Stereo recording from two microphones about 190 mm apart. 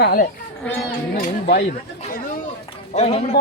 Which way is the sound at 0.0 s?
50° left (ahead or behind).